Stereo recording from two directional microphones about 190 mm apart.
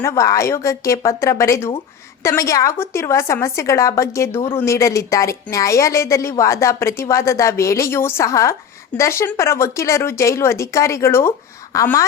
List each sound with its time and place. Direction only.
0.0 s speech: 15° left (ahead or behind)